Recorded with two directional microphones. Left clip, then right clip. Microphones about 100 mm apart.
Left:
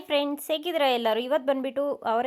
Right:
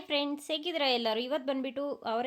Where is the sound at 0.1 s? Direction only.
30° left (ahead or behind).